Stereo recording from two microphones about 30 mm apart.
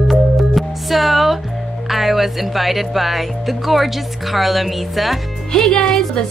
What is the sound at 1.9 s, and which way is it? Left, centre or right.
Speech, centre.